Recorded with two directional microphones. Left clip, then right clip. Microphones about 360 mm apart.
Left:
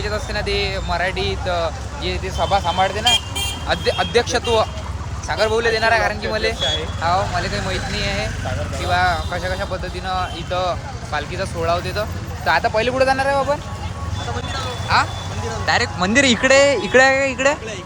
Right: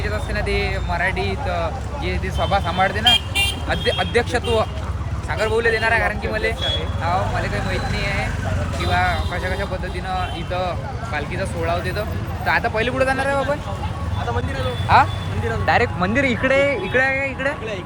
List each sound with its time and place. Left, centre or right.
0.0 s speech: centre
15.6 s speech: centre